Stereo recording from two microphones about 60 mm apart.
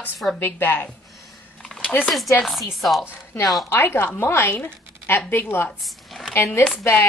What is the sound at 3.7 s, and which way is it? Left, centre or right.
Speech, left.